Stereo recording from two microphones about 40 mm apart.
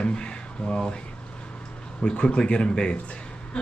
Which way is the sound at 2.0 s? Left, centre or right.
Left.